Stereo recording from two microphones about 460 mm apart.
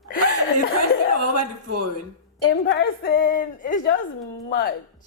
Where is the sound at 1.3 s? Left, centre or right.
Right.